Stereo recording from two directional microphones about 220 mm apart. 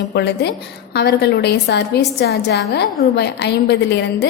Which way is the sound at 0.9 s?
50° left (ahead or behind).